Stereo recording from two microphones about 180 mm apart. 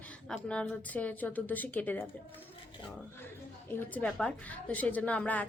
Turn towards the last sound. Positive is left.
turn(degrees=5)  # may be behind; listen again after turning